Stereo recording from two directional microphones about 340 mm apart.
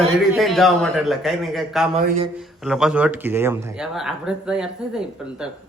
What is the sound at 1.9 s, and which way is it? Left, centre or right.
Speech, centre.